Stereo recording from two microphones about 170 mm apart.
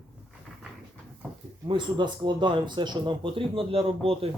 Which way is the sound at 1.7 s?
25° right (ahead or behind).